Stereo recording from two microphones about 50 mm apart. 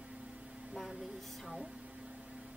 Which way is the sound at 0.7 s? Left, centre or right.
Centre.